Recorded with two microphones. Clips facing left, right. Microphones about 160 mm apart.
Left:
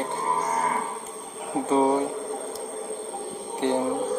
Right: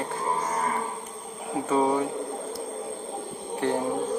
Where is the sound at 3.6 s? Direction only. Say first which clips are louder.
Left 2 dB; 20° left (ahead or behind).